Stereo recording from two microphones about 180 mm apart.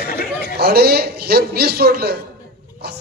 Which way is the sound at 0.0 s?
60° left (ahead or behind).